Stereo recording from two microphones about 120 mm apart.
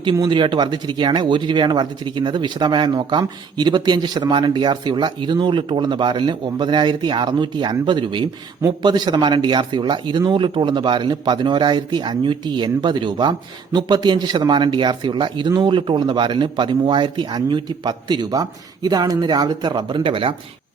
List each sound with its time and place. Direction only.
0.0 s speech: 40° right (ahead or behind)